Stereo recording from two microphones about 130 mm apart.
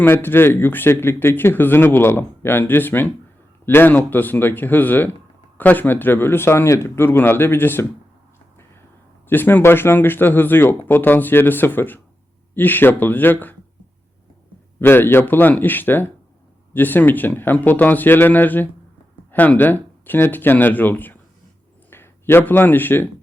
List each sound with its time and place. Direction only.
0.0 s speech: 15° left (ahead or behind)
9.2 s speech: 15° left (ahead or behind)
14.8 s speech: 15° left (ahead or behind)